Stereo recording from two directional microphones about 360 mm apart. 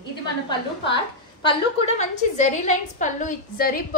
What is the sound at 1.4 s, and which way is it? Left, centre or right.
A woman's voice, centre.